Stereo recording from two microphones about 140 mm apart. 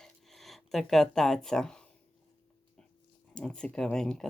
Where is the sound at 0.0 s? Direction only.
Centre (ahead or behind).